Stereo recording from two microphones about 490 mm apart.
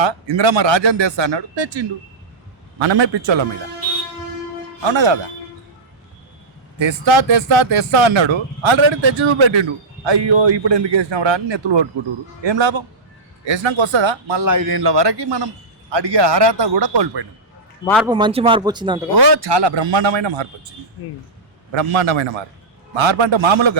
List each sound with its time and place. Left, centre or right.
0.0 s speech: right
4.8 s speech: right
6.8 s speech: right
14.4 s a man's voice: right
17.8 s speech: centre
19.1 s a man's voice: right